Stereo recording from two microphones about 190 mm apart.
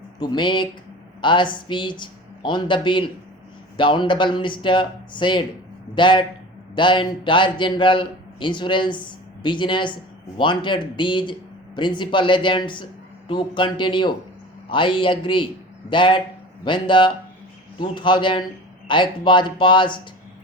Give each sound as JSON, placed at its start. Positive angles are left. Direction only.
{"t": 0.2, "sound": "a man's voice", "side_deg": 25}